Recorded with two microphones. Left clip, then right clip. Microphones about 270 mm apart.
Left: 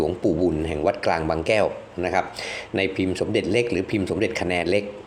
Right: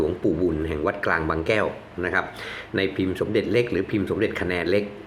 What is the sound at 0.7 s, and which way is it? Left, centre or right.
Speech, centre.